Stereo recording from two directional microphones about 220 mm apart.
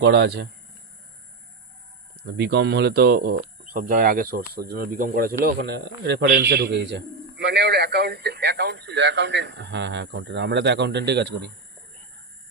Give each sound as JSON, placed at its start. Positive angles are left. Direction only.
{"t": 0.0, "sound": "speech", "side_deg": -50}
{"t": 2.2, "sound": "speech", "side_deg": -50}